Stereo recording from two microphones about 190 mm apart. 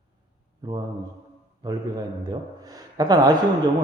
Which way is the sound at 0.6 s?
20° right (ahead or behind).